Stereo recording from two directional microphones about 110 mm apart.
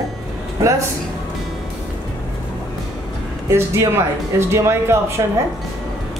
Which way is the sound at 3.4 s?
25° right (ahead or behind).